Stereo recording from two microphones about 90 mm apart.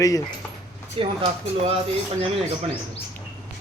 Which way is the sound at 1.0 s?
75° right (ahead or behind).